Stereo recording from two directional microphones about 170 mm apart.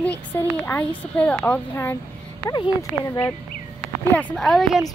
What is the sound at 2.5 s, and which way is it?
Speech, 25° left (ahead or behind).